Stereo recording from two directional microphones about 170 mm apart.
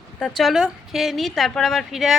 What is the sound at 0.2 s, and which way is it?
A woman's voice, centre (ahead or behind).